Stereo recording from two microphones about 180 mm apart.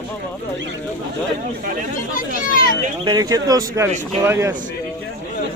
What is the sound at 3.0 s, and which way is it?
Speech, 20° right (ahead or behind).